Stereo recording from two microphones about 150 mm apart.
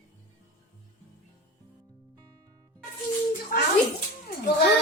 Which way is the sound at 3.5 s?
75° left (ahead or behind).